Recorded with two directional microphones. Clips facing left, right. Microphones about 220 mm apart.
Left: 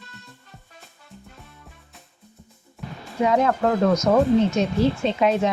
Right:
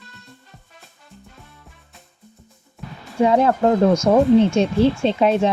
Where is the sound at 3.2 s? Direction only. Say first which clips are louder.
Right 4 dB; 30° right (ahead or behind).